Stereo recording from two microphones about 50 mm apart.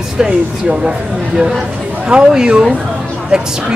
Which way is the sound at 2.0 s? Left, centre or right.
Centre.